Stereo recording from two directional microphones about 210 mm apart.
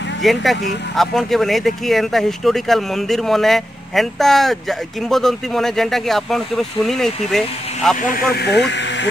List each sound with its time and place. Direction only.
0.2 s speech: centre (ahead or behind)
8.0 s speech: 45° left (ahead or behind)